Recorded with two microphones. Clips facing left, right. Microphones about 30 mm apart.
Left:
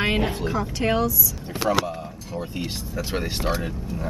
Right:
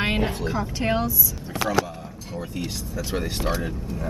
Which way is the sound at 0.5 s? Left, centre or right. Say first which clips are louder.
Left 1 dB; centre.